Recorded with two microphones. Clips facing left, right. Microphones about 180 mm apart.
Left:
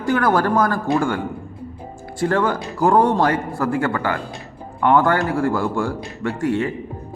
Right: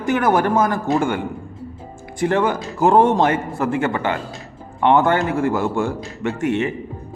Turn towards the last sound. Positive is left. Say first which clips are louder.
# right 1 dB
turn(degrees=-20)  # may be behind; listen again after turning